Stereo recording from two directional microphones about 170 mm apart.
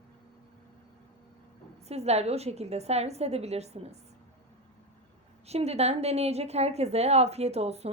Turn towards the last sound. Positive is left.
turn(degrees=-40)  # may be behind; listen again after turning